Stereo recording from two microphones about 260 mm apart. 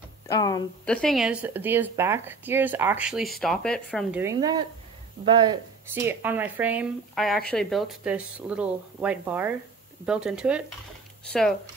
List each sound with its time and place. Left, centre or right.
0.3 s speech: centre
0.8 s speech: centre
4.2 s speech: centre